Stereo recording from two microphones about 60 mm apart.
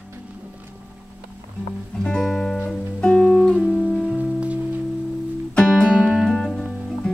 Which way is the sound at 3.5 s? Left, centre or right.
Centre.